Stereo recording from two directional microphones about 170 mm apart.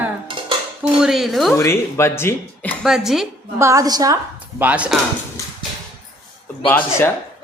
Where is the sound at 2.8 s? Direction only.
Centre (ahead or behind).